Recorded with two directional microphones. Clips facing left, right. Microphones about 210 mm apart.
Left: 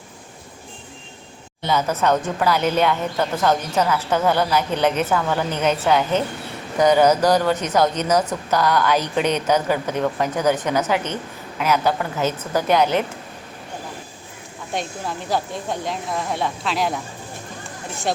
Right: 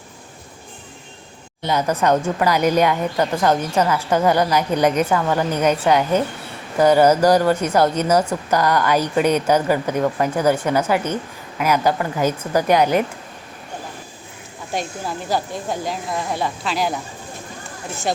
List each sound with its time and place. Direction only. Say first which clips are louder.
1.6 s a woman's voice: right 1 dB; 15° right (ahead or behind)
14.7 s speech: right 1 dB; centre (ahead or behind)